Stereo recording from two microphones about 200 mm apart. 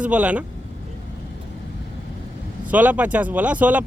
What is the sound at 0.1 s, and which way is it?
Speech, 5° right (ahead or behind).